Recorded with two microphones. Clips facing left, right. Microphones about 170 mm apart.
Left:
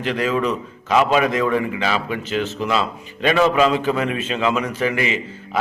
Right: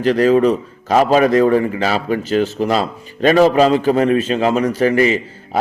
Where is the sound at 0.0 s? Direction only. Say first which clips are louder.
Right 8 dB; 40° right (ahead or behind).